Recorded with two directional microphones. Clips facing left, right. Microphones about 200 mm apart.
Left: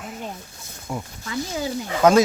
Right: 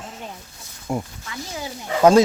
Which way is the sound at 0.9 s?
45° right (ahead or behind).